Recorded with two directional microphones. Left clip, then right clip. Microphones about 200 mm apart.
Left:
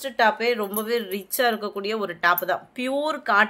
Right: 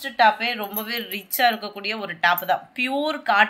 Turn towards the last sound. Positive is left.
turn(degrees=50)  # may be behind; listen again after turning